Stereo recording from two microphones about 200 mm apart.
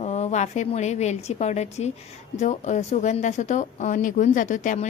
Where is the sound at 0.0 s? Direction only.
35° left (ahead or behind).